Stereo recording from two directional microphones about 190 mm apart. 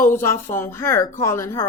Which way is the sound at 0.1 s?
10° left (ahead or behind).